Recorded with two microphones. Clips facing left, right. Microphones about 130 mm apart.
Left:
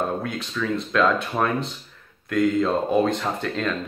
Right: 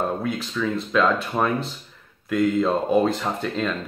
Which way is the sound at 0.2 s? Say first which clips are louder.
Right 2 dB; centre (ahead or behind).